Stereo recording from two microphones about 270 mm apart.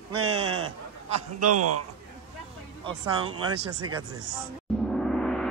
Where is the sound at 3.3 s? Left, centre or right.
Right.